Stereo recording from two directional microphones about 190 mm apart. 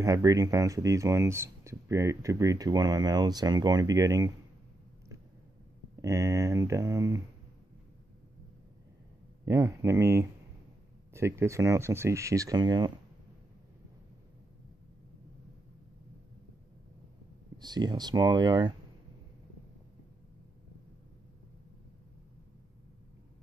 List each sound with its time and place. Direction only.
0.0 s speech: 20° right (ahead or behind)
5.9 s speech: 15° right (ahead or behind)
9.4 s speech: 15° right (ahead or behind)
17.6 s speech: 20° right (ahead or behind)